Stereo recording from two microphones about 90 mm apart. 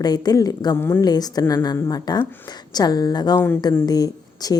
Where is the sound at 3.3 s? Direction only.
25° left (ahead or behind).